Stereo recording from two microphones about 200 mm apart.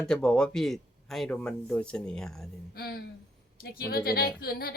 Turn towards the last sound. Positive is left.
turn(degrees=50)  # may be behind; listen again after turning